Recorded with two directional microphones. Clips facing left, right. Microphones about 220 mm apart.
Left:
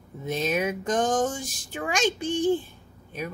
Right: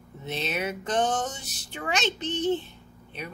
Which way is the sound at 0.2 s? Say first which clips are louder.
Left 5 dB; 10° left (ahead or behind).